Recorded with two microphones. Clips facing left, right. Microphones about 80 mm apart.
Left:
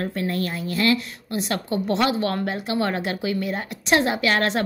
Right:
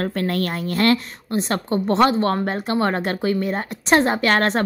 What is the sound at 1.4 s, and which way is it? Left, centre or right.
Speech, right.